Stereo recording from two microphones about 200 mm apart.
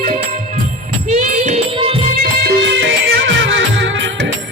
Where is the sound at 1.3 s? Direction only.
35° right (ahead or behind).